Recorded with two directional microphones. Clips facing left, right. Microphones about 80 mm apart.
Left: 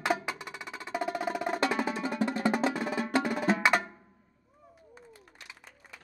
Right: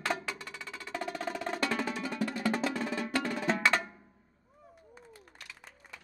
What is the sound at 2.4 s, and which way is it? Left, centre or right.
Drum, centre.